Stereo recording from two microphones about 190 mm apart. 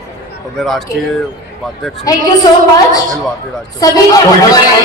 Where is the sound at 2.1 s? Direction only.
20° left (ahead or behind).